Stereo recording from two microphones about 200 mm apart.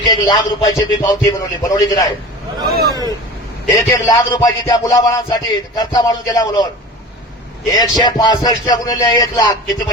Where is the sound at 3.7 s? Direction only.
20° left (ahead or behind).